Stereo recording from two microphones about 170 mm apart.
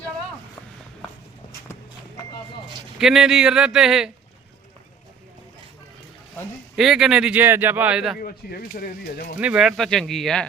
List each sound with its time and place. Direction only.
3.0 s speech: 5° right (ahead or behind)
6.7 s speech: centre (ahead or behind)
8.2 s speech: 60° left (ahead or behind)
9.4 s speech: 5° right (ahead or behind)